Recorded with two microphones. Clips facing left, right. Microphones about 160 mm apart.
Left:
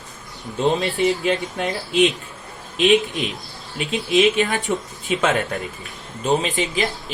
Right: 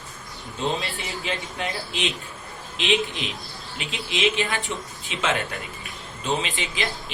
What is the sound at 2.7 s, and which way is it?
A man's voice, 45° left (ahead or behind).